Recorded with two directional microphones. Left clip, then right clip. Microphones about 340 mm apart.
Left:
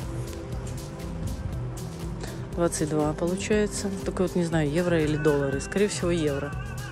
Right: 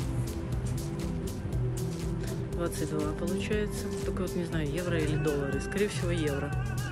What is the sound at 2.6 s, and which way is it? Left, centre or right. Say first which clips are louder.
Speech: left 8 dB; centre.